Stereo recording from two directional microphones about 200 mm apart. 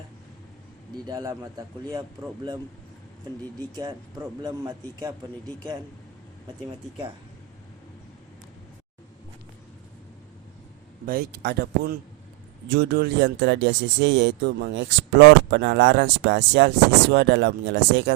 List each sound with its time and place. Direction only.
1.0 s speech: 15° right (ahead or behind)
3.8 s speech: 20° right (ahead or behind)
11.0 s speech: 45° right (ahead or behind)